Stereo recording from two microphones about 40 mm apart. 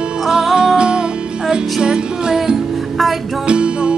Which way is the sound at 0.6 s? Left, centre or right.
Right.